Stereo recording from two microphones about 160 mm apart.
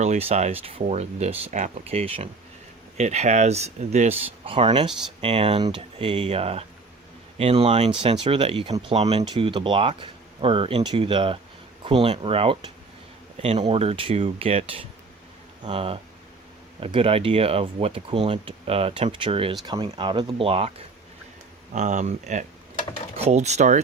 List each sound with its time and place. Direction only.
0.0 s speech: 40° right (ahead or behind)
21.7 s speech: 50° right (ahead or behind)